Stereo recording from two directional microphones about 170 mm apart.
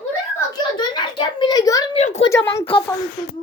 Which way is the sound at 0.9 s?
25° left (ahead or behind).